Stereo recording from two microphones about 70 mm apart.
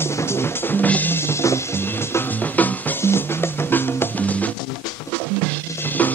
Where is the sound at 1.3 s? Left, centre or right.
Left.